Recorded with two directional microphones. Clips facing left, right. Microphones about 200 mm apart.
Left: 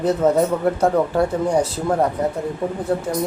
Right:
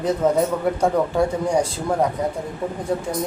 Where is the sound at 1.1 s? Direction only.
10° right (ahead or behind).